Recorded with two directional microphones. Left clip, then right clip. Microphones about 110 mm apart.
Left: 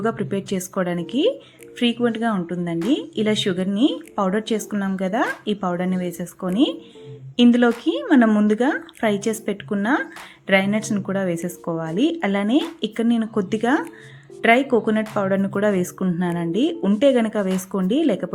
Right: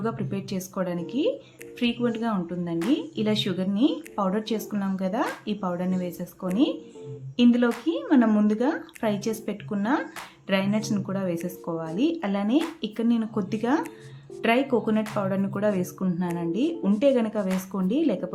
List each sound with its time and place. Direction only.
0.0 s a woman's voice: 40° left (ahead or behind)
1.8 s a woman's voice: 35° left (ahead or behind)